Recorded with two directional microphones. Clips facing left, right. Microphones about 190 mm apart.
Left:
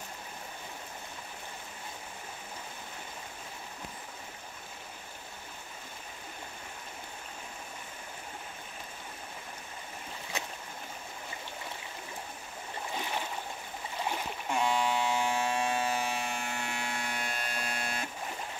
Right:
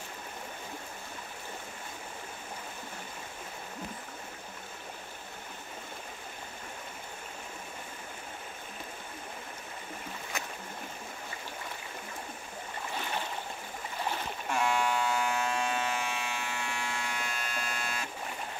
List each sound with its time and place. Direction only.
14.5 s electric shaver: 15° left (ahead or behind); by 18.0 s 35° left (ahead or behind)